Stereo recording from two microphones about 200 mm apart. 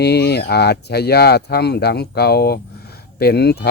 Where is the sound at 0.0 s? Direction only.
55° left (ahead or behind).